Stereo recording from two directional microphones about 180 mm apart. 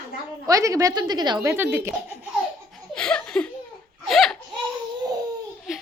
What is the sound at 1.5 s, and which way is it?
Speech, 10° right (ahead or behind).